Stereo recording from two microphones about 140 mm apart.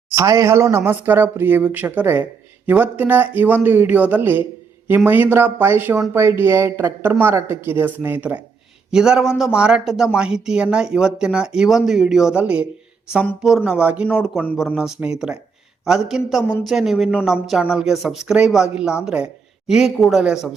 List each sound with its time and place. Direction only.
0.1 s speech: 20° right (ahead or behind)
13.7 s speech: 10° right (ahead or behind)